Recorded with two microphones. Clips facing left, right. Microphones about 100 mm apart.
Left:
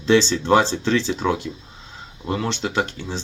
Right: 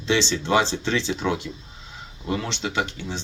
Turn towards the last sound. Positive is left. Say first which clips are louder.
# left 3 dB
turn(degrees=35)  # may be behind; listen again after turning